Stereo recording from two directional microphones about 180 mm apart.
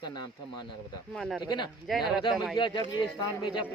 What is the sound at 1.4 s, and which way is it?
Speech, 25° left (ahead or behind).